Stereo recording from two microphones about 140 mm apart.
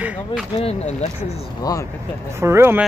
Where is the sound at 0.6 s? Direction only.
50° left (ahead or behind).